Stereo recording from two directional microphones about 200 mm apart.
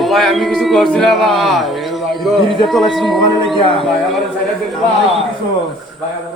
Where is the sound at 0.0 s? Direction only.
Centre (ahead or behind).